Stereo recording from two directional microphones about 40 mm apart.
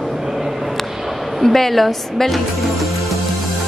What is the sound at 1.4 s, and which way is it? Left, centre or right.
Speech, centre.